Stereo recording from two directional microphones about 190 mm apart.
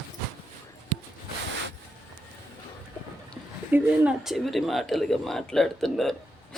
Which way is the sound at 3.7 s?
5° right (ahead or behind).